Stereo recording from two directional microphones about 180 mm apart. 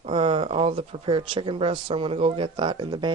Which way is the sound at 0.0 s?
30° right (ahead or behind).